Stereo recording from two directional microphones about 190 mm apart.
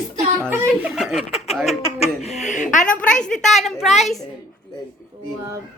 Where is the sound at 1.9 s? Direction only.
35° left (ahead or behind).